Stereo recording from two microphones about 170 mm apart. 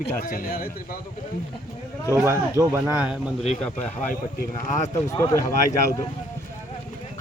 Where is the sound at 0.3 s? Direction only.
55° left (ahead or behind).